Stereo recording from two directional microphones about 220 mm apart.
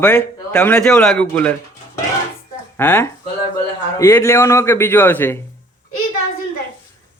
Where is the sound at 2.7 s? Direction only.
10° left (ahead or behind).